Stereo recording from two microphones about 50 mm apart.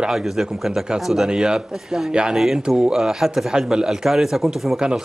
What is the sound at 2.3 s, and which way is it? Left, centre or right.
A man's voice, centre.